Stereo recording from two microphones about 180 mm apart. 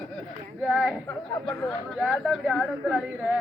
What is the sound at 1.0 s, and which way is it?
A woman's voice, 5° left (ahead or behind).